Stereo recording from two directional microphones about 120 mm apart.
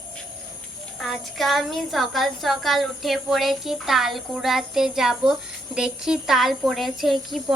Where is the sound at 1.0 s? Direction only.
Centre (ahead or behind).